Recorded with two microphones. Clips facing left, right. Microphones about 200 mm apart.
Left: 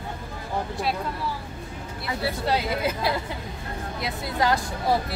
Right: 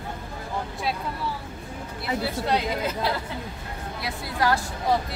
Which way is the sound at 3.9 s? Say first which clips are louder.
Left 1 dB; 20° left (ahead or behind).